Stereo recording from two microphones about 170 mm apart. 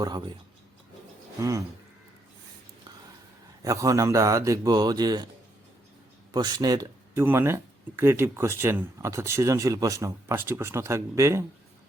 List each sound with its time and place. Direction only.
0.0 s speech: 25° right (ahead or behind)
1.4 s speech: 20° right (ahead or behind)
3.6 s speech: 20° right (ahead or behind)
6.3 s speech: 25° right (ahead or behind)